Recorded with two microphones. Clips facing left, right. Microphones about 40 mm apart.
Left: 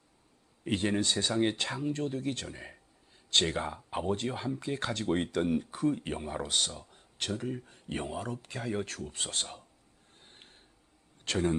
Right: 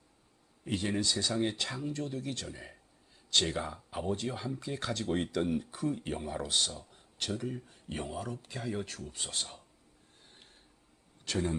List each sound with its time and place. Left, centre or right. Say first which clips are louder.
0.6 s speech: left 3 dB; left
6.1 s speech: left 1 dB; left
7.4 s speech: left 2 dB; left
7.9 s speech: left 2 dB; left
10.2 s a sound: left 3 dB; left
11.3 s speech: left 3 dB; left